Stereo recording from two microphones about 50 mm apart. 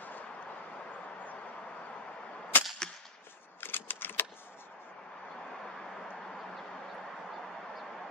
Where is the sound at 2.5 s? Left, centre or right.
Left.